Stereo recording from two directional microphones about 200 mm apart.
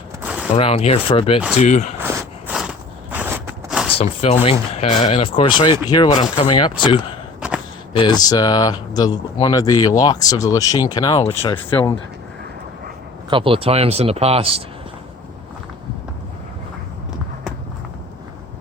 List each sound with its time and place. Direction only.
0.2 s a sound: 5° right (ahead or behind)
0.5 s speech: 30° left (ahead or behind)
2.0 s walk: 10° right (ahead or behind)
3.9 s speech: 30° left (ahead or behind); by 11.9 s 10° left (ahead or behind)
13.3 s speech: 25° right (ahead or behind)